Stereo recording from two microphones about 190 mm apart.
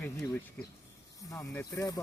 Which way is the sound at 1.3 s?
15° left (ahead or behind).